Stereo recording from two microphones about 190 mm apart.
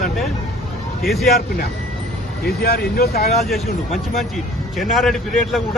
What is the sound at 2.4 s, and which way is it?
Speech, 55° left (ahead or behind).